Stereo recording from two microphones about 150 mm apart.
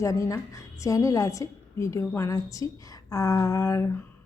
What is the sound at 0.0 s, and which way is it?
A woman's voice, 20° left (ahead or behind).